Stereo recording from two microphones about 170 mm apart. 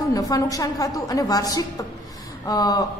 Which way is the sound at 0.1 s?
20° left (ahead or behind).